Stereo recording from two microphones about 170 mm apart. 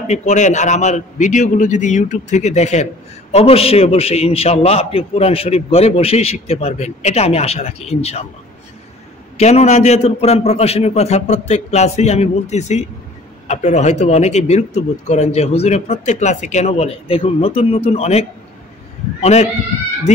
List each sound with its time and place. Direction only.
0.0 s a man's voice: 45° left (ahead or behind)
9.4 s a man's voice: 40° left (ahead or behind)
19.2 s a man's voice: 40° left (ahead or behind)